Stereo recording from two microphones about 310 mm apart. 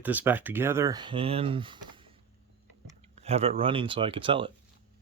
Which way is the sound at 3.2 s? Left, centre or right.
Centre.